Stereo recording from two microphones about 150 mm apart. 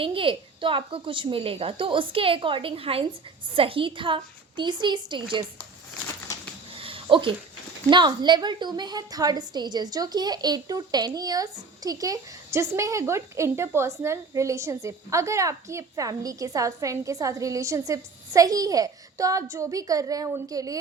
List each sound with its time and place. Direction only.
0.0 s a woman's voice: 35° right (ahead or behind)
6.7 s a sound: 35° right (ahead or behind)
7.9 s a woman's voice: 30° right (ahead or behind)